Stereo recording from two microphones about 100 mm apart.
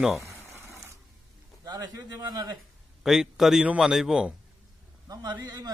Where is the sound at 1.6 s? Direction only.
40° right (ahead or behind).